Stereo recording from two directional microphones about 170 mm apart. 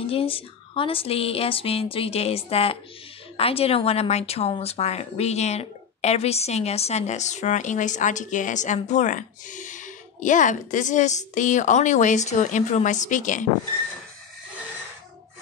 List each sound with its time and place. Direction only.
0.0 s a woman's voice: 35° left (ahead or behind)